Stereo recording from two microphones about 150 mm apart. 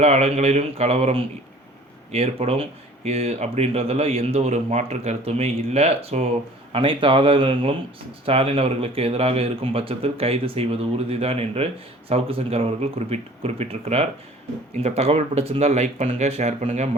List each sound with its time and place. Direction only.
0.0 s speech: 45° right (ahead or behind)